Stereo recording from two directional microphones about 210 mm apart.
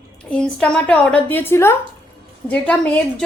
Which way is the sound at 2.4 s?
5° left (ahead or behind).